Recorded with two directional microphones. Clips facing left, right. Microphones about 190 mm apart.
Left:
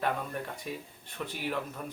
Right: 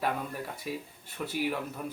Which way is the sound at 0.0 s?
5° right (ahead or behind).